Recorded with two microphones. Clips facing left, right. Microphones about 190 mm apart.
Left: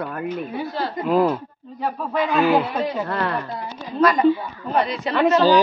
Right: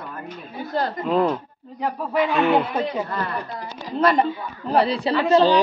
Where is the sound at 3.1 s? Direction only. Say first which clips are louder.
Left 4 dB; 65° left (ahead or behind).